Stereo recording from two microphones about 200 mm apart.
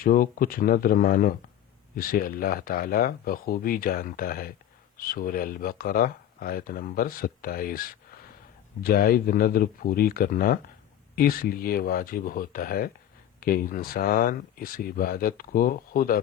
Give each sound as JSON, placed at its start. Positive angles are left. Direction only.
{"t": 0.0, "sound": "speech", "side_deg": 45}